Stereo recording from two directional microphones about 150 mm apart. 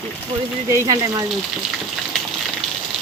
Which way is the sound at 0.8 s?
25° right (ahead or behind).